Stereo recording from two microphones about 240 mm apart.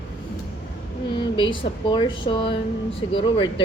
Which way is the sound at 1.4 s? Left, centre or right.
Left.